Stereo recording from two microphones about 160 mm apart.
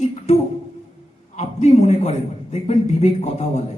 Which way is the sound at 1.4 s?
45° left (ahead or behind).